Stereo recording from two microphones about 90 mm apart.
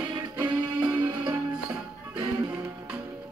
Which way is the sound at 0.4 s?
55° right (ahead or behind).